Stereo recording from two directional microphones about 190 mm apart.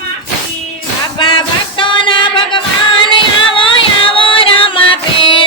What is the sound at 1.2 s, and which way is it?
Male singing, 25° left (ahead or behind).